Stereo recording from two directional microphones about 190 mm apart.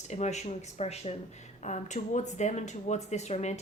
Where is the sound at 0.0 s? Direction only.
35° left (ahead or behind).